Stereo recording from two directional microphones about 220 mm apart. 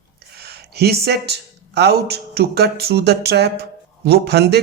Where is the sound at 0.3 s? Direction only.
45° right (ahead or behind).